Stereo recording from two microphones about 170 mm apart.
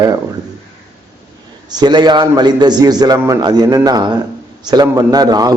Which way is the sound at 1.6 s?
25° right (ahead or behind).